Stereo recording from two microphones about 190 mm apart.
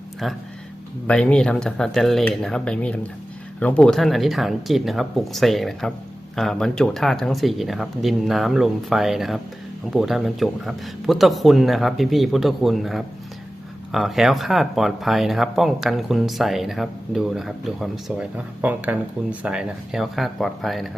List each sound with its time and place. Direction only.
1.0 s speech: 5° left (ahead or behind)